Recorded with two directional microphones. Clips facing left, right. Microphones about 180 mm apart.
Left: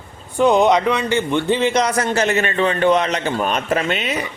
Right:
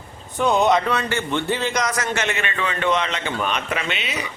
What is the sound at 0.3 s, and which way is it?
A man's voice, 15° left (ahead or behind).